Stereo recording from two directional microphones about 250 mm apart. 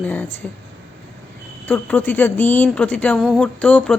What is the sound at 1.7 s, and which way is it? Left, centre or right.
A woman's voice, centre.